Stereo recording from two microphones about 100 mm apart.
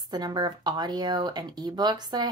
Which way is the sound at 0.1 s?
45° right (ahead or behind).